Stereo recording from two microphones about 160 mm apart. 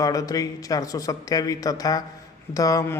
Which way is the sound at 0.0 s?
20° left (ahead or behind).